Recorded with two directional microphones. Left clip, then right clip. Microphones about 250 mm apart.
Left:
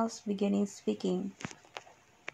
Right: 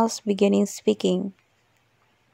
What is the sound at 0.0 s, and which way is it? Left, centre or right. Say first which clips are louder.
Speech: right 12 dB; right.